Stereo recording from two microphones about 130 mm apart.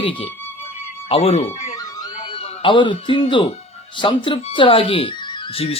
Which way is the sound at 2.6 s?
40° left (ahead or behind).